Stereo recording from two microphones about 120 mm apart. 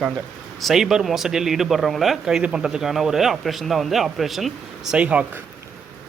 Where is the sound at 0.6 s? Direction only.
Centre (ahead or behind).